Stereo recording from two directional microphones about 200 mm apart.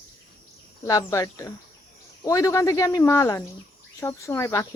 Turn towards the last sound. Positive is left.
turn(degrees=15)  # may be behind; listen again after turning